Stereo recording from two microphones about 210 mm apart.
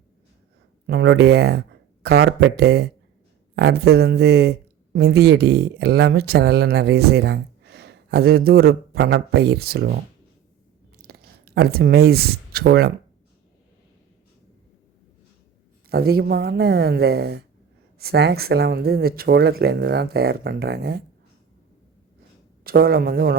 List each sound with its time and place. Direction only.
0.9 s speech: 55° right (ahead or behind)
10.9 s a sound: 50° right (ahead or behind)
15.9 s speech: 50° right (ahead or behind)
22.6 s speech: 45° right (ahead or behind)